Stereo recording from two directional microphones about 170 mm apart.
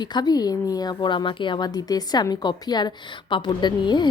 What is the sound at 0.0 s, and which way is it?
A woman's voice, 25° left (ahead or behind).